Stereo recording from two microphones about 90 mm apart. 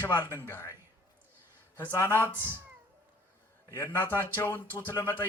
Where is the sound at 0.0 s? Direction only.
20° left (ahead or behind).